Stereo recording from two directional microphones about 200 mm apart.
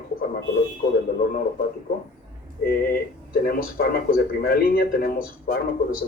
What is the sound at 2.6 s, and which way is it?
A man's voice, 50° left (ahead or behind).